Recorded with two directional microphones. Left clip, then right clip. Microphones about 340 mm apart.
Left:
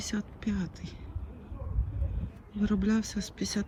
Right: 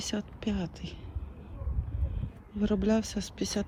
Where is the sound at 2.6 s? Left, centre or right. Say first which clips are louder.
Right 2 dB; centre.